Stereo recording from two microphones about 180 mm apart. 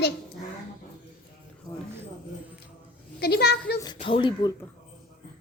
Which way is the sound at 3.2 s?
65° left (ahead or behind).